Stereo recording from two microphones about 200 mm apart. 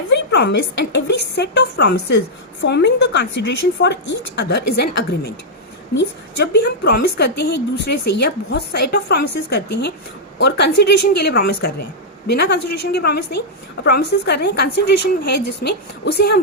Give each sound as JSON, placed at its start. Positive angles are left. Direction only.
{"t": 0.1, "sound": "a woman's voice", "side_deg": 60}